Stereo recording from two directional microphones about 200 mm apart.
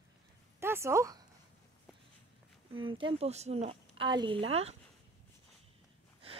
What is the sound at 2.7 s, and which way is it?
A woman's voice, 25° right (ahead or behind).